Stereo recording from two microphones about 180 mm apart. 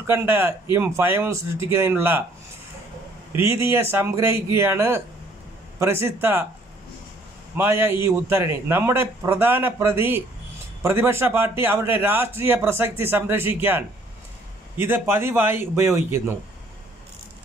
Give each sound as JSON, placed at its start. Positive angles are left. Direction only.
{"t": 0.0, "sound": "a man's voice", "side_deg": -10}
{"t": 3.3, "sound": "a man's voice", "side_deg": -15}
{"t": 7.5, "sound": "a man's voice", "side_deg": -15}